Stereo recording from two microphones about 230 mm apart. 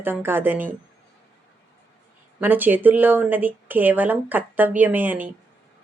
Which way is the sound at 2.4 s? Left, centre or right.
Centre.